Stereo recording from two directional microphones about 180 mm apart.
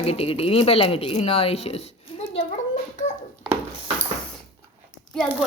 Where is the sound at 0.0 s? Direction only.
35° left (ahead or behind).